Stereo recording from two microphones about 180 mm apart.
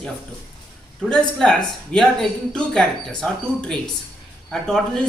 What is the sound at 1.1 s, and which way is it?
Speech, 5° left (ahead or behind).